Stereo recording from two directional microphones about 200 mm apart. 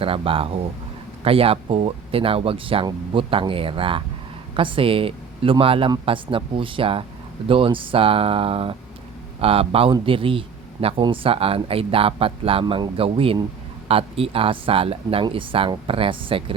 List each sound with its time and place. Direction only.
0.0 s a man's voice: 25° right (ahead or behind)